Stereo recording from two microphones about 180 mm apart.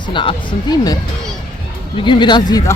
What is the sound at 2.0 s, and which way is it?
Speech, 25° left (ahead or behind).